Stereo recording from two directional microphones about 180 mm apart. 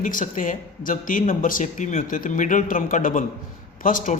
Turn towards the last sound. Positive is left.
turn(degrees=50)  # may be behind; listen again after turning